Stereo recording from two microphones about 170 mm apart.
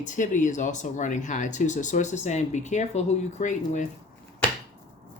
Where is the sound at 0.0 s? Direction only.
45° left (ahead or behind).